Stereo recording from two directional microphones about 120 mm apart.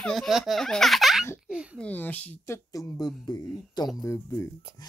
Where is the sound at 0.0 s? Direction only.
Centre (ahead or behind).